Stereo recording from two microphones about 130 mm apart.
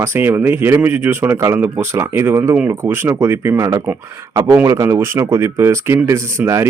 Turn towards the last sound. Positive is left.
turn(degrees=-20)  # may be behind; listen again after turning